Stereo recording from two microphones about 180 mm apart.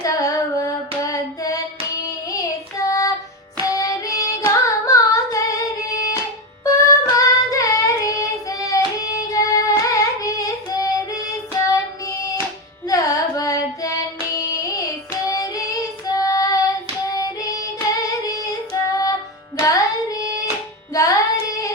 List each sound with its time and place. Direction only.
0.0 s female singing: 20° left (ahead or behind)
1.1 s a sound: 20° left (ahead or behind)
2.3 s child singing: 20° left (ahead or behind)
3.6 s singing: 20° left (ahead or behind)
6.7 s child singing: 20° left (ahead or behind)
12.9 s carnatic music: 20° left (ahead or behind)
14.3 s child singing: 20° left (ahead or behind)
17.1 s music: 20° left (ahead or behind)
18.3 s child singing: 20° left (ahead or behind)
19.5 s music: 20° left (ahead or behind)